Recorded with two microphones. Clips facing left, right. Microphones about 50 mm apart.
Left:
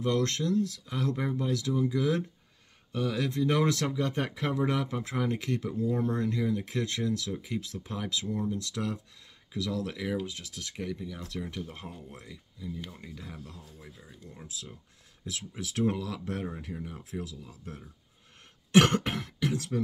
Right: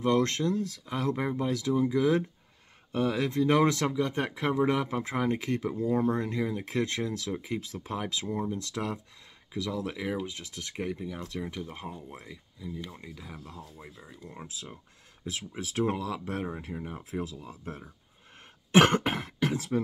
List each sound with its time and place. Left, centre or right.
0.0 s speech: right; by 13.4 s centre
13.8 s speech: right
16.0 s speech: centre; by 17.8 s right
18.7 s cough: right